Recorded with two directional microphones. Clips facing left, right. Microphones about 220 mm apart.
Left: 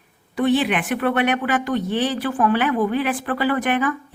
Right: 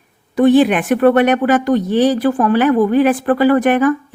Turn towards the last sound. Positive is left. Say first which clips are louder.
# right 9 dB
turn(degrees=-45)  # may be behind; listen again after turning